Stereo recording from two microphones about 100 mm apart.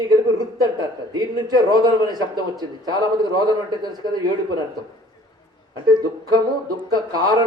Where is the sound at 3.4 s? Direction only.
40° right (ahead or behind).